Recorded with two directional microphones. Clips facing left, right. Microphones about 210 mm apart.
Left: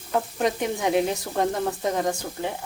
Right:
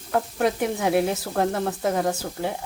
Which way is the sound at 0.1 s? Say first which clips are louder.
Right 1 dB; centre (ahead or behind).